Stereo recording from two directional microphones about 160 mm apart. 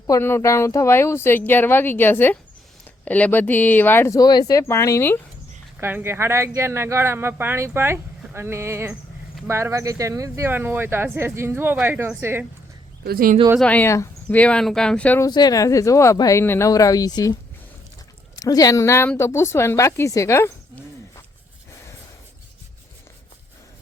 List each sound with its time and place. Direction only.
0.1 s speech: 15° left (ahead or behind)
5.8 s speech: 15° right (ahead or behind)
13.1 s speech: 65° right (ahead or behind)
13.6 s speech: 10° left (ahead or behind)
15.2 s speech: 25° left (ahead or behind)
18.3 s speech: 20° left (ahead or behind)